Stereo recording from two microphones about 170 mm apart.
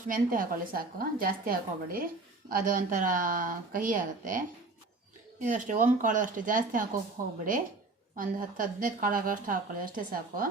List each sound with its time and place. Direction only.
0.1 s a woman's voice: 55° right (ahead or behind)
8.1 s speech: 55° right (ahead or behind)